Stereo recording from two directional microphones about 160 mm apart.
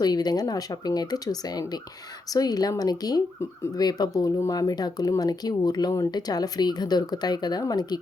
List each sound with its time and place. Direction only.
0.0 s speech: 25° left (ahead or behind)